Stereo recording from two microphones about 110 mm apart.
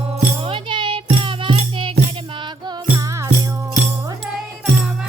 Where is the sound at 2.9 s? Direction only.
30° right (ahead or behind).